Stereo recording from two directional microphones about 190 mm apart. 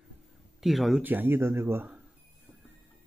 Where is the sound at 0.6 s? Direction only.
Centre (ahead or behind).